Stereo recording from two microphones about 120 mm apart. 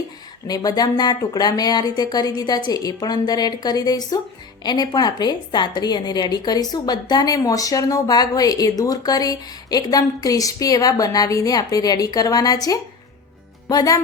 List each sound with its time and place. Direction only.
0.4 s a woman's voice: 35° left (ahead or behind)